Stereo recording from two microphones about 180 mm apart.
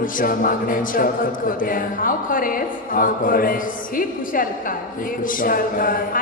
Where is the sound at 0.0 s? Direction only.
50° left (ahead or behind).